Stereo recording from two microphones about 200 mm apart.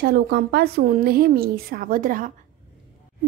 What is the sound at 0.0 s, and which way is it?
A woman's voice, 50° right (ahead or behind).